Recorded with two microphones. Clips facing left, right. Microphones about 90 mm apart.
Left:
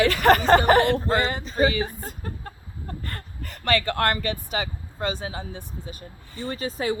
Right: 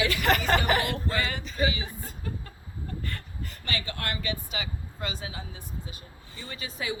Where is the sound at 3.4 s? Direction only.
65° left (ahead or behind).